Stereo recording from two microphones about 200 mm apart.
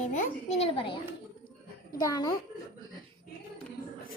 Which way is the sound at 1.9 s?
20° left (ahead or behind).